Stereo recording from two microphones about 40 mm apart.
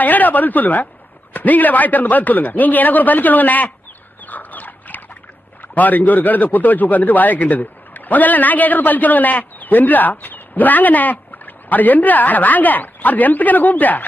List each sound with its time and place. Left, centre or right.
0.0 s speech: left
4.3 s dog: left
5.7 s speech: left